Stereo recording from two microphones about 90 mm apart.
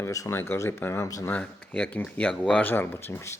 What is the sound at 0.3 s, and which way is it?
Speech, 25° left (ahead or behind).